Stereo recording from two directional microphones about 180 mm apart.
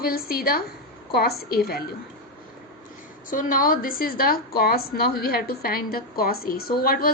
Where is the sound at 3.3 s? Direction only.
50° left (ahead or behind).